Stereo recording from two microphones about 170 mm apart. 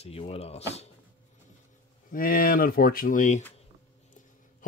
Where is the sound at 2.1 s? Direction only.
55° left (ahead or behind).